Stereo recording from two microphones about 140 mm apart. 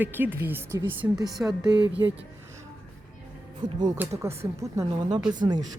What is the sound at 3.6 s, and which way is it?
Speech, 30° right (ahead or behind).